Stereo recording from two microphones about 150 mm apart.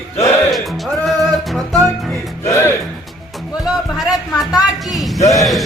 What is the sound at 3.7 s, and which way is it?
Music, centre (ahead or behind).